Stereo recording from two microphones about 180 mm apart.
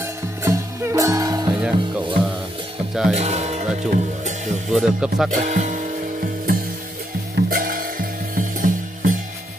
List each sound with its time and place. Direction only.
0.0 s music: 15° right (ahead or behind)
1.5 s music: 10° right (ahead or behind)
2.9 s speech: 5° right (ahead or behind)
3.2 s speech: 35° right (ahead or behind)
4.6 s speech: centre (ahead or behind)
5.3 s music: 45° right (ahead or behind)